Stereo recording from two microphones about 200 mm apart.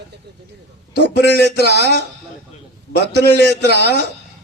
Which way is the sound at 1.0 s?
55° right (ahead or behind).